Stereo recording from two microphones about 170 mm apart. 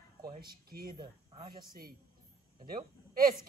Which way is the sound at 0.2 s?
60° right (ahead or behind).